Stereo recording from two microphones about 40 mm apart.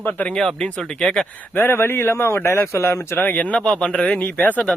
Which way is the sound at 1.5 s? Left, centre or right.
Left.